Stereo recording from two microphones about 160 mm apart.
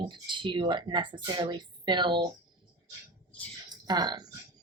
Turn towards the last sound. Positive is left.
turn(degrees=-25)  # may be behind; listen again after turning